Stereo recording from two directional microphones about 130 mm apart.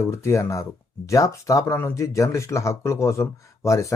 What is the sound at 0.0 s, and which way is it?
Speech, 25° left (ahead or behind).